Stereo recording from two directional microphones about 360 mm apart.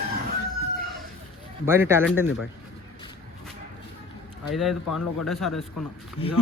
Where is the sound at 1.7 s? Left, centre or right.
Centre.